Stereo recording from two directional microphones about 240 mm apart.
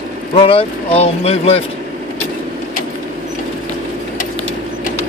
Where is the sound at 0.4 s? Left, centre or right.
Left.